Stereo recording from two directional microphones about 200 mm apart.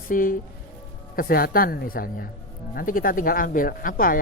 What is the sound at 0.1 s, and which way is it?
Speech, 45° left (ahead or behind).